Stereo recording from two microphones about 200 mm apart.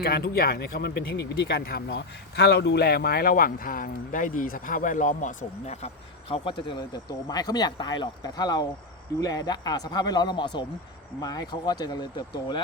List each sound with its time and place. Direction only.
0.0 s speech: 50° left (ahead or behind); by 12.6 s 20° left (ahead or behind)